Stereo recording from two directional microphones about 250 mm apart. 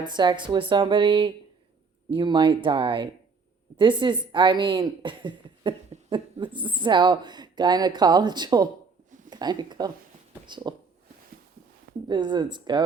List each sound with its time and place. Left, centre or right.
0.0 s a woman's voice: centre
12.0 s a woman's voice: centre